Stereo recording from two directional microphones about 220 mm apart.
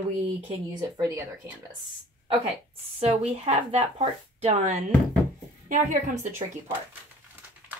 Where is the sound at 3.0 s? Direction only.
30° right (ahead or behind).